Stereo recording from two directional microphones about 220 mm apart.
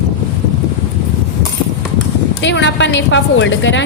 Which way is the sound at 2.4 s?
55° left (ahead or behind).